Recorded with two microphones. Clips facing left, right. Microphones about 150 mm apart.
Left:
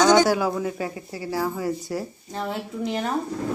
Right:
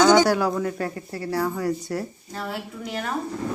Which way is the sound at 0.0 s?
Centre (ahead or behind).